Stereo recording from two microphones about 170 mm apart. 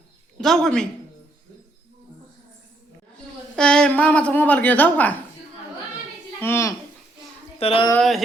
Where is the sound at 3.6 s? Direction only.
5° left (ahead or behind).